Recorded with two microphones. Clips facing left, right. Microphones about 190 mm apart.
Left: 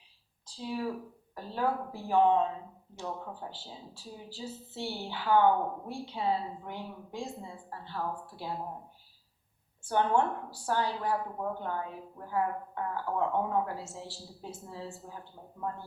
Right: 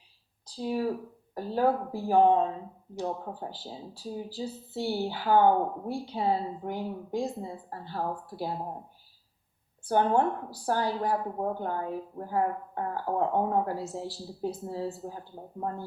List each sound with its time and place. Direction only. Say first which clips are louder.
0.5 s speech: right 5 dB; 40° right (ahead or behind)
9.9 s speech: right 3 dB; 35° right (ahead or behind)